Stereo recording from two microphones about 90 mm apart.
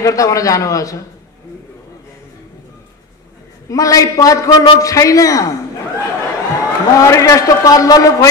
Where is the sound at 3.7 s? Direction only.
40° left (ahead or behind).